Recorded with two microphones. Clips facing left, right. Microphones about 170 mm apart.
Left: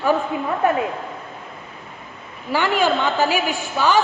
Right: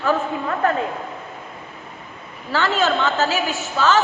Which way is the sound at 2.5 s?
15° left (ahead or behind).